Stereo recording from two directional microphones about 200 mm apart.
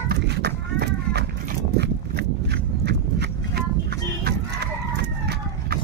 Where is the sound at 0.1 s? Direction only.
55° right (ahead or behind).